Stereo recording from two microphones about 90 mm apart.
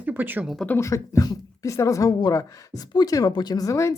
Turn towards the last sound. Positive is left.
turn(degrees=35)  # may be behind; listen again after turning